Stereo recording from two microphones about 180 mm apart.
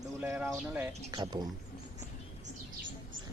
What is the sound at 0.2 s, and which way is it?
Speech, 10° right (ahead or behind).